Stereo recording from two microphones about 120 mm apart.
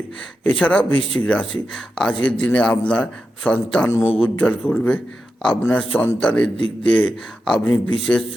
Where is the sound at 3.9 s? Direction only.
20° left (ahead or behind).